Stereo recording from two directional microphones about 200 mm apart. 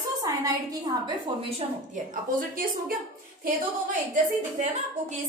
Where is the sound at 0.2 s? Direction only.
15° right (ahead or behind).